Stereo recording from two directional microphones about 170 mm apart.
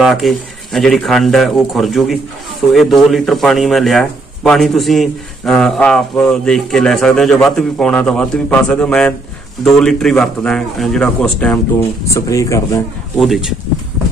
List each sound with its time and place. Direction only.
0.0 s speech: centre (ahead or behind)
12.1 s speech: 20° left (ahead or behind)
13.2 s speech: centre (ahead or behind)